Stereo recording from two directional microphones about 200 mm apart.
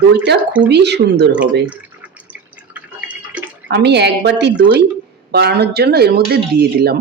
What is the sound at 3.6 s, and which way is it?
A woman's voice, 60° right (ahead or behind).